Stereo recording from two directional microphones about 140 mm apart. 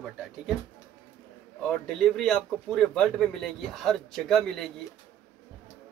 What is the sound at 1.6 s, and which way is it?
Speech, 5° left (ahead or behind).